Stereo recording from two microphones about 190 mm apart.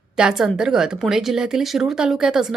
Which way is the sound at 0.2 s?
5° right (ahead or behind).